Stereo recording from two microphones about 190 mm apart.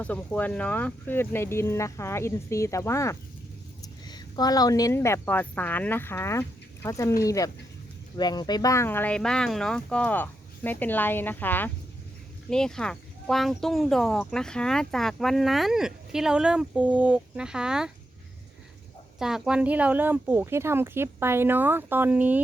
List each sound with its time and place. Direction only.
0.0 s speech: 10° left (ahead or behind)
19.2 s speech: 5° right (ahead or behind)